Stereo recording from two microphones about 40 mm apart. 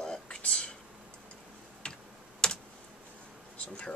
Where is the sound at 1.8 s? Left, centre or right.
Left.